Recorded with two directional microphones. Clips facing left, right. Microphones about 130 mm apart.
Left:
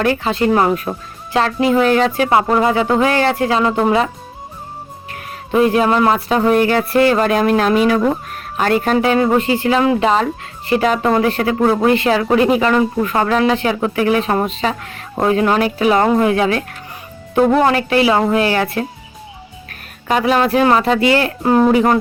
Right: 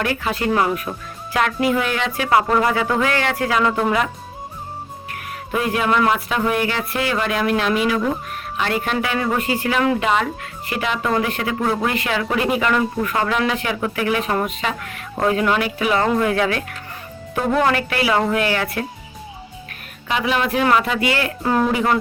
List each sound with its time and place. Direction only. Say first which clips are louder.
0.0 s speech: left 6 dB; 30° left (ahead or behind)
5.1 s speech: left 8 dB; 30° left (ahead or behind)
10.8 s speech: left 5 dB; 40° left (ahead or behind)
20.1 s speech: left 6 dB; 40° left (ahead or behind)
21.7 s speech: left 6 dB; 35° left (ahead or behind)